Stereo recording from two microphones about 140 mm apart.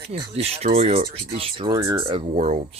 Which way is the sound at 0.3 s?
45° right (ahead or behind).